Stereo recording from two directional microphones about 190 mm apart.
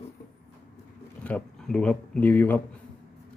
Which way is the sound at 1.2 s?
5° left (ahead or behind).